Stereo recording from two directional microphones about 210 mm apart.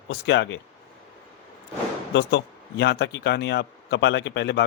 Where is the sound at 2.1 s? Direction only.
55° left (ahead or behind).